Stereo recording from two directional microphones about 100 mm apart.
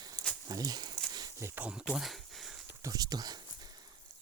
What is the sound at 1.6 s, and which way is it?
Speech, 10° right (ahead or behind).